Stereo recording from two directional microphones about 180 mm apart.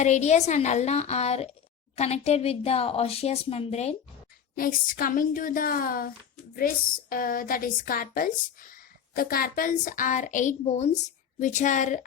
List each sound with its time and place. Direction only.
0.0 s a woman's voice: 40° left (ahead or behind)
4.5 s a woman's voice: 50° left (ahead or behind)